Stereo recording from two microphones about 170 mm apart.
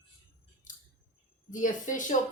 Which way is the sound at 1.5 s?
50° left (ahead or behind).